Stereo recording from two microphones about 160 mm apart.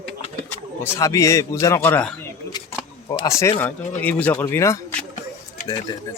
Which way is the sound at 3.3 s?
15° left (ahead or behind).